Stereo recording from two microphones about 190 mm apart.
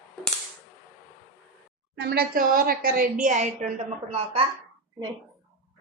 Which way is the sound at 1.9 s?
55° right (ahead or behind).